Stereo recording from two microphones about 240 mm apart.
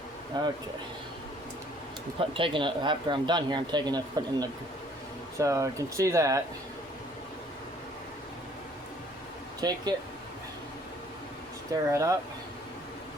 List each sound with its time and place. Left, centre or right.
0.3 s speech: centre
2.1 s speech: right
9.6 s speech: centre
11.9 s speech: centre